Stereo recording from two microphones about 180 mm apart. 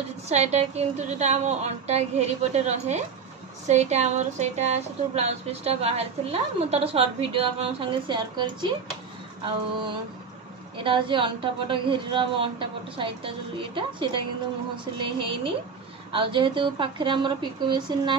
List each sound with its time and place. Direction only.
0.3 s a woman's voice: 40° right (ahead or behind)
16.1 s a woman's voice: 30° right (ahead or behind)